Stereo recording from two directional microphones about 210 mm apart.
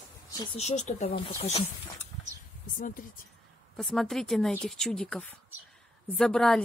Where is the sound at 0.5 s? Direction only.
30° left (ahead or behind).